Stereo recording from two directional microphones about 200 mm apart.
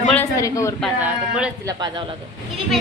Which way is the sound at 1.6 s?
20° right (ahead or behind).